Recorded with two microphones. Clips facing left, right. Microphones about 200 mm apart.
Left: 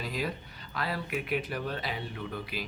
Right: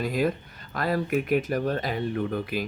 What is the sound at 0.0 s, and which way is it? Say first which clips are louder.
Speech: right 9 dB; 50° right (ahead or behind).